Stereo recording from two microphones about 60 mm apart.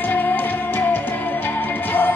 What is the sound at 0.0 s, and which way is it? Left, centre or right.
Music, left.